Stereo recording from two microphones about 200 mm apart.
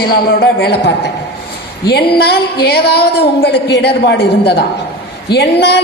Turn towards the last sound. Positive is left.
turn(degrees=55)  # may be behind; listen again after turning